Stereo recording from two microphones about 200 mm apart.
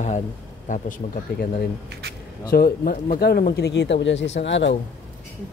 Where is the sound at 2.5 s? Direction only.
50° left (ahead or behind); by 4.7 s 65° left (ahead or behind).